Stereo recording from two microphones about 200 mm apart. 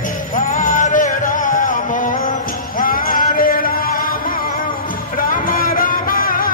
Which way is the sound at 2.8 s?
45° left (ahead or behind).